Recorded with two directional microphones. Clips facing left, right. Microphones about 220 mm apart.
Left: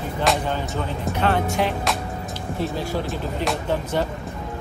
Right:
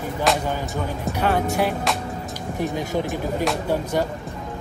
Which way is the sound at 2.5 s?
15° right (ahead or behind).